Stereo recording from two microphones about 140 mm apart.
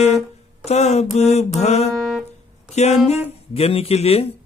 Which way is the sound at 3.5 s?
45° left (ahead or behind).